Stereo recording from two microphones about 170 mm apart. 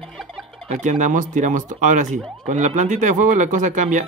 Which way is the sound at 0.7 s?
45° right (ahead or behind).